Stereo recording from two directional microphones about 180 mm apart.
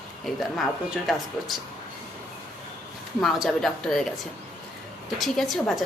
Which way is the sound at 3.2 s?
Centre (ahead or behind).